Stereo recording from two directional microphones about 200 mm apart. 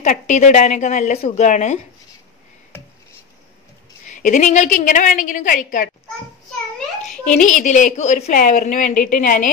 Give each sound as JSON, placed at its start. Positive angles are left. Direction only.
{"t": 0.0, "sound": "a woman's voice", "side_deg": 40}
{"t": 4.1, "sound": "a woman's voice", "side_deg": 35}
{"t": 7.2, "sound": "a woman's voice", "side_deg": 35}